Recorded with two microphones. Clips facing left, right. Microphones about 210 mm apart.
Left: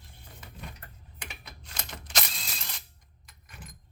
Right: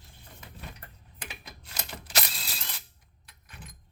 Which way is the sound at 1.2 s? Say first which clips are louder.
Right 1 dB; 5° right (ahead or behind).